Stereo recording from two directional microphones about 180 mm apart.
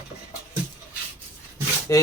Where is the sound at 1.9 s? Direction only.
15° left (ahead or behind).